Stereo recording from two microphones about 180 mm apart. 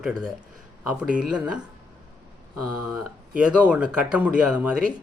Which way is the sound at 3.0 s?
5° right (ahead or behind).